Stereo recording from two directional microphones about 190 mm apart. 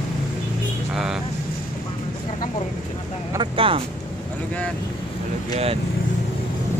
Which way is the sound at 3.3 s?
25° right (ahead or behind).